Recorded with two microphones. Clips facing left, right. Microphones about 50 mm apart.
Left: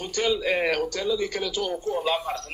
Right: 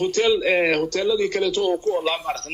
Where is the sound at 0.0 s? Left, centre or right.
Right.